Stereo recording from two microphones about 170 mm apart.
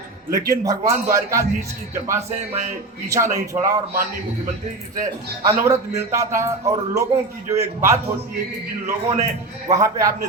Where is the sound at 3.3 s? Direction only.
20° right (ahead or behind).